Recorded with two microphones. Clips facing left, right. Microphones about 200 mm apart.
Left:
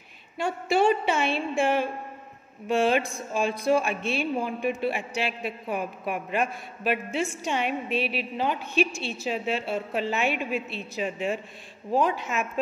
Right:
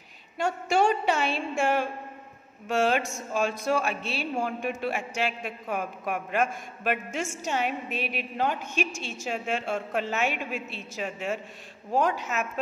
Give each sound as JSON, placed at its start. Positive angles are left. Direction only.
{"t": 0.4, "sound": "a man's voice", "side_deg": -45}